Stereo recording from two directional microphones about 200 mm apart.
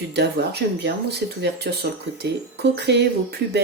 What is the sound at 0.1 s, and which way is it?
Speech, 55° right (ahead or behind).